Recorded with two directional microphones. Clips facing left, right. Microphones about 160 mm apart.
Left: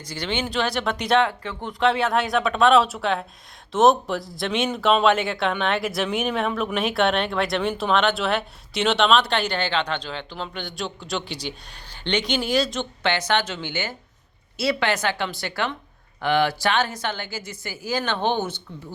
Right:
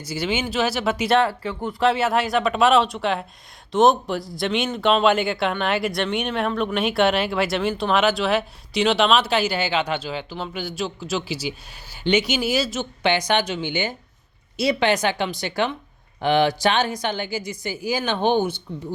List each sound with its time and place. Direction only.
0.0 s a woman's voice: 10° right (ahead or behind)